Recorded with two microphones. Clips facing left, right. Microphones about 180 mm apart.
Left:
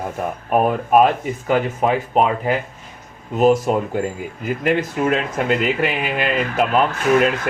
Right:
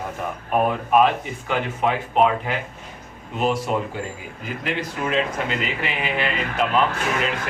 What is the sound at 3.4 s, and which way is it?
Speech, 45° left (ahead or behind).